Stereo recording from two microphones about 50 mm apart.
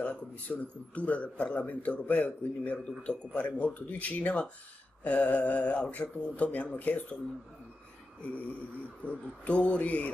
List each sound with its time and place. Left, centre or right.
0.0 s a man's voice: left
9.0 s a man's voice: left